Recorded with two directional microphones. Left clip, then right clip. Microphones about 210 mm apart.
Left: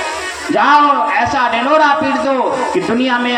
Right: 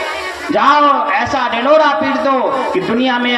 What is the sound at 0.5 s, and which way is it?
Speech, 60° right (ahead or behind).